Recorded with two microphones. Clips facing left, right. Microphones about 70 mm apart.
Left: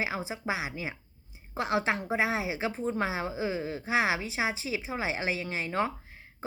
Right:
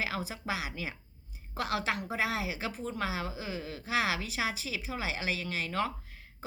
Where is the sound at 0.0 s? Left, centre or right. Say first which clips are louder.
Left 3 dB; left.